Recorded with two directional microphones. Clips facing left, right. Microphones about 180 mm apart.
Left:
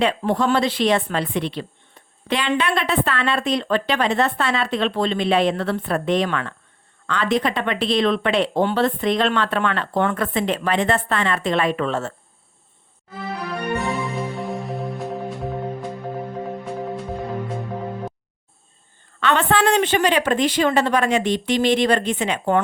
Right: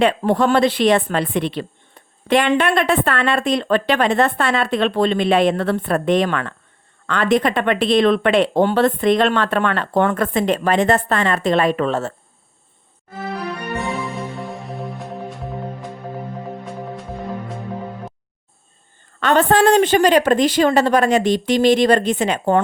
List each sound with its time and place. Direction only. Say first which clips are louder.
0.0 s a woman's voice: right 4 dB; 55° right (ahead or behind); by 12.1 s 40° right (ahead or behind)
13.7 s music: even; centre (ahead or behind)
19.2 s a woman's voice: right 4 dB; 40° right (ahead or behind)